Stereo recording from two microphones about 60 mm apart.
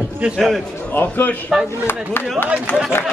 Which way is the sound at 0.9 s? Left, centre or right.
Left.